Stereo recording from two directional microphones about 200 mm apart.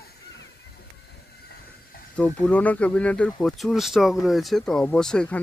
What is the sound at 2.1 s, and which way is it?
Speech, 5° left (ahead or behind).